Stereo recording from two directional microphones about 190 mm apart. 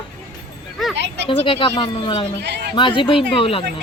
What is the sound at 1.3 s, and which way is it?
Speech, 25° left (ahead or behind).